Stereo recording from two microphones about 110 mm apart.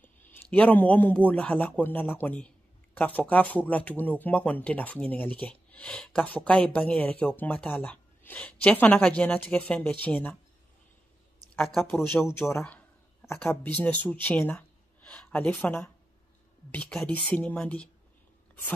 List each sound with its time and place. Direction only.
0.0 s speech: 15° left (ahead or behind)
11.6 s speech: 5° left (ahead or behind)
12.1 s speech: 20° left (ahead or behind)
13.8 s speech: 15° left (ahead or behind)
16.7 s speech: 5° left (ahead or behind)